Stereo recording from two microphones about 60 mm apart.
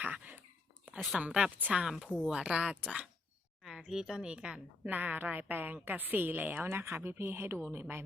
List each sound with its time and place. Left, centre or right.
0.0 s a sound: right
1.2 s a woman's voice: centre
1.5 s a woman's voice: right
1.8 s a woman's voice: centre
3.6 s a woman's voice: centre
4.9 s a woman's voice: right